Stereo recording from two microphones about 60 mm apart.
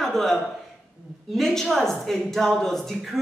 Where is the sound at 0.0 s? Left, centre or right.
Centre.